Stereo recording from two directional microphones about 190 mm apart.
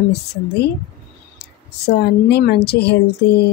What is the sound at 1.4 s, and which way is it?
Speech, 60° left (ahead or behind).